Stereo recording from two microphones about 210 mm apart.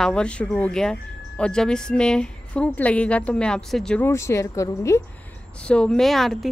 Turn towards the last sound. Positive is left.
turn(degrees=0)  # may be behind; listen again after turning